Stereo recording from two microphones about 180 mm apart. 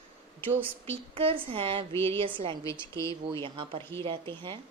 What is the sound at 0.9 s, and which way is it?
Speech, 30° right (ahead or behind).